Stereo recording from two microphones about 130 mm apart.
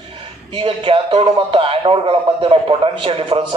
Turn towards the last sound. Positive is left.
turn(degrees=-45)  # may be behind; listen again after turning